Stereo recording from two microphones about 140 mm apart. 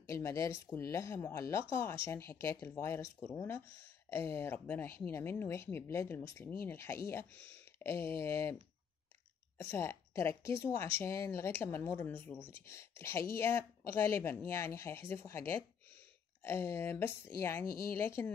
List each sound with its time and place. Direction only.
0.0 s speech: 20° left (ahead or behind)
9.6 s speech: 20° left (ahead or behind)